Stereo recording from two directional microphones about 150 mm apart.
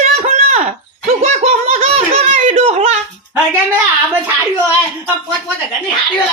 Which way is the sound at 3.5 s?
15° right (ahead or behind).